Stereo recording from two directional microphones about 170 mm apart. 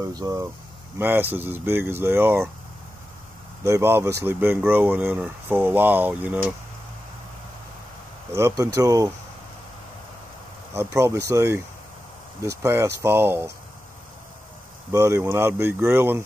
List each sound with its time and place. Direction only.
0.1 s speech: 20° right (ahead or behind)
3.6 s speech: 15° right (ahead or behind)
8.4 s speech: 20° right (ahead or behind)
10.7 s speech: 15° right (ahead or behind)
14.9 s speech: 15° right (ahead or behind)